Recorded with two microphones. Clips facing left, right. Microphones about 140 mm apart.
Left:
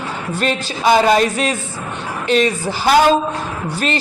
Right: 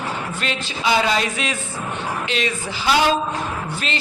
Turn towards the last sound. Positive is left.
turn(degrees=45)  # may be behind; listen again after turning